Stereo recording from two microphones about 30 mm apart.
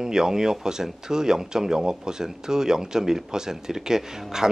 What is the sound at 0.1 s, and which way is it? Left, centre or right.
Speech, centre.